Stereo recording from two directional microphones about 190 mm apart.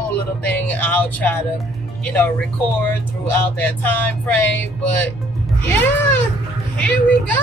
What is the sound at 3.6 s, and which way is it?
Speech, 10° left (ahead or behind).